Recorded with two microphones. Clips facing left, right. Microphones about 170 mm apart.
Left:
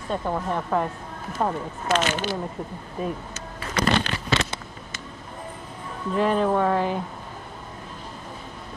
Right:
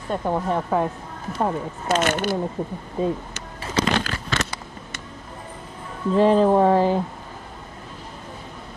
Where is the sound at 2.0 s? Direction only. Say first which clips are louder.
Right 4 dB; 50° right (ahead or behind).